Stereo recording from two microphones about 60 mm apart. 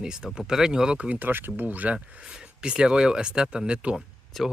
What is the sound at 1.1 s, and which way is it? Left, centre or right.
Speech, right.